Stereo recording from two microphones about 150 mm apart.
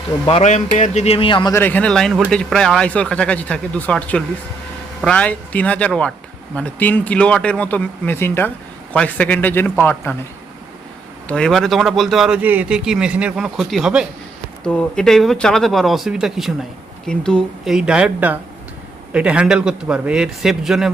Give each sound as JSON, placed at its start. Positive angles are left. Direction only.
{"t": 0.3, "sound": "a man's voice", "side_deg": 45}
{"t": 1.5, "sound": "a man's voice", "side_deg": 10}
{"t": 11.3, "sound": "a man's voice", "side_deg": 5}